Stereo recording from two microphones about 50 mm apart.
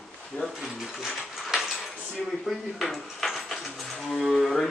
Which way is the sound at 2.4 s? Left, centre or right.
Centre.